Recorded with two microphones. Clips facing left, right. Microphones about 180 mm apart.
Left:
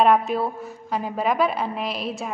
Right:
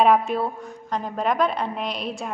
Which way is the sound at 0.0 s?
Centre (ahead or behind).